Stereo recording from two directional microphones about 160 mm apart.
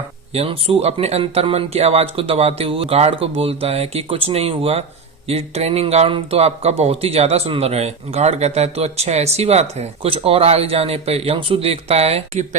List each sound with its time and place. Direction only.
0.3 s speech: 35° right (ahead or behind)